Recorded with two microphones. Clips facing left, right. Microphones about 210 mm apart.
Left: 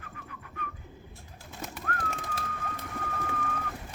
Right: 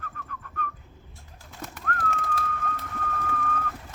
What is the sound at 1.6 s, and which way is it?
Bird, 5° left (ahead or behind).